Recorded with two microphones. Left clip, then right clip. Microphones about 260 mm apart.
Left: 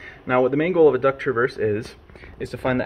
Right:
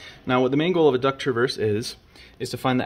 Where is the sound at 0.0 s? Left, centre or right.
Right.